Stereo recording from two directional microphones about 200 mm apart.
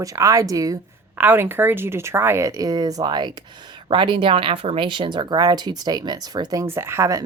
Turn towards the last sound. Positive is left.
turn(degrees=-15)  # may be behind; listen again after turning